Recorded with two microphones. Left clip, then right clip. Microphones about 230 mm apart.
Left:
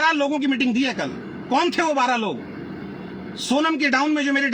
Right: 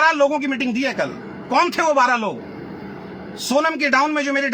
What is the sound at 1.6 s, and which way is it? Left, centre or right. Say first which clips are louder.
Speech: right 4 dB; right.